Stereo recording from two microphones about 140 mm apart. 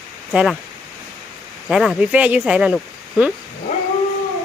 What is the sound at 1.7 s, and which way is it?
Speech, 5° right (ahead or behind).